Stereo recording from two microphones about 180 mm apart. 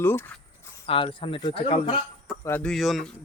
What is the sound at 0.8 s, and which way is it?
Speech, 30° left (ahead or behind).